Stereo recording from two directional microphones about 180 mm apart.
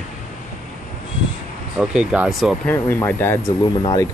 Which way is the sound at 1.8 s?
5° right (ahead or behind).